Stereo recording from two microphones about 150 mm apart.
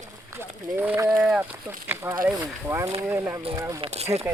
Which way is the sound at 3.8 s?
45° right (ahead or behind).